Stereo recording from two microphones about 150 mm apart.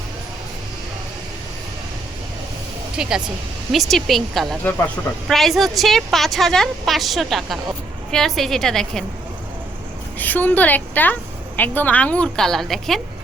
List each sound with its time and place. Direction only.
3.0 s a woman's voice: 5° right (ahead or behind)
10.2 s a woman's voice: 10° left (ahead or behind)